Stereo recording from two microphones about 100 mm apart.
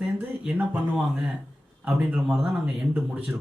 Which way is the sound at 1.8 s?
10° right (ahead or behind).